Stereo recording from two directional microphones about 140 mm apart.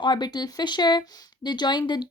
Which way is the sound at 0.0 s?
30° left (ahead or behind).